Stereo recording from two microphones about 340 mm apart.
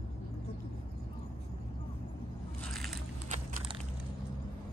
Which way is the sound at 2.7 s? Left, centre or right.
Centre.